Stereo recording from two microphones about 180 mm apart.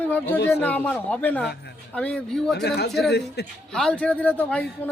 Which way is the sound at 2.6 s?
65° left (ahead or behind).